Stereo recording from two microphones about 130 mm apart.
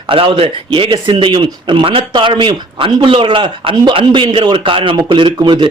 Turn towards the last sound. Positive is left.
turn(degrees=-35)  # may be behind; listen again after turning